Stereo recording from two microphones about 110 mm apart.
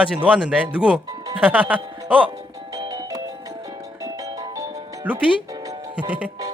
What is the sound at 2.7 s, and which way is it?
Music, 35° right (ahead or behind).